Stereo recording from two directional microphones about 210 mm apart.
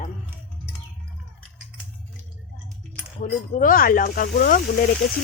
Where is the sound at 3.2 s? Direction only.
40° left (ahead or behind).